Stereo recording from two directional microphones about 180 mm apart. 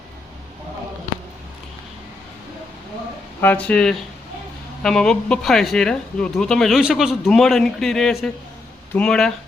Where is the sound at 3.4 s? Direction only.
5° left (ahead or behind).